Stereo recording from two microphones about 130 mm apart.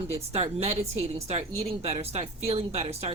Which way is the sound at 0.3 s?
55° right (ahead or behind).